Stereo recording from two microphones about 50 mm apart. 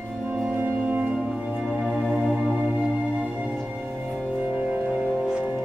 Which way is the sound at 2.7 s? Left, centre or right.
Right.